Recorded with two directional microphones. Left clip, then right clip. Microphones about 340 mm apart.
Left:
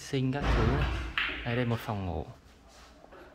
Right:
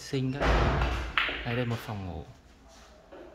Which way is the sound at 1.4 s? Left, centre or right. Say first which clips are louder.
Even; centre.